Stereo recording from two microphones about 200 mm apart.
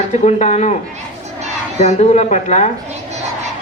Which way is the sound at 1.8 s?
35° left (ahead or behind).